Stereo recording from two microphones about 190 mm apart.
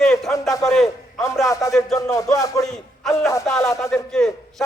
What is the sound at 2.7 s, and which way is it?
A man's voice, centre (ahead or behind).